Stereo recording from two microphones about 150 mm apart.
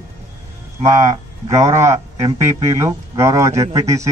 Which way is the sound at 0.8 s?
50° right (ahead or behind).